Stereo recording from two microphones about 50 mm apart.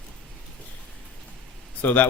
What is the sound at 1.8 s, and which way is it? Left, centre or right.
Mantra, left.